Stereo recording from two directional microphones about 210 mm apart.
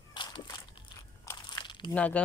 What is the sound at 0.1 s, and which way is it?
Crumpling, 20° left (ahead or behind).